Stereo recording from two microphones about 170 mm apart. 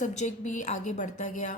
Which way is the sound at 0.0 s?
45° left (ahead or behind).